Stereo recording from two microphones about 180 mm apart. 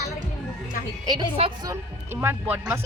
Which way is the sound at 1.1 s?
25° right (ahead or behind).